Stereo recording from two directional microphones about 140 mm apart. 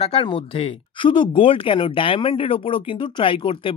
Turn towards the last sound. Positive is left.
turn(degrees=35)  # may be behind; listen again after turning